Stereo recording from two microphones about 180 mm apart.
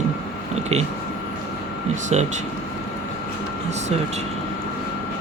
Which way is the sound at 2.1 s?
40° right (ahead or behind).